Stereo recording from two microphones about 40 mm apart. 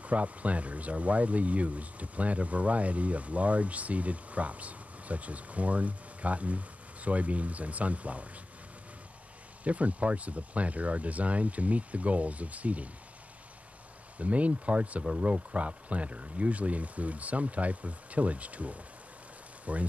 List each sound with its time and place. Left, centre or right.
0.0 s speech: right
9.7 s speech: right
14.1 s speech: right